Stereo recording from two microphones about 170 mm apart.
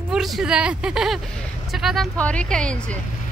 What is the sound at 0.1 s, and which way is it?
A woman's voice, centre (ahead or behind).